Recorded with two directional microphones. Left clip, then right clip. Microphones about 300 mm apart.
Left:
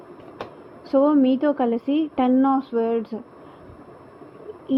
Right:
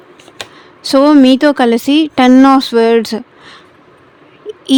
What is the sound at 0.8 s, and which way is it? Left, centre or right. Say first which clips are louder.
Speech: right 11 dB; right.